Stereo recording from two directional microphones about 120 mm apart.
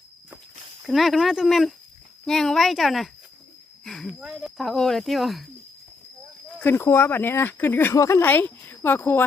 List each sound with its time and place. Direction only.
0.9 s speech: centre (ahead or behind)
6.6 s speech: 20° left (ahead or behind)